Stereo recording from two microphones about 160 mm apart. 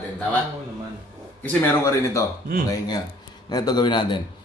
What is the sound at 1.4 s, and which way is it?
A man's voice, 15° left (ahead or behind).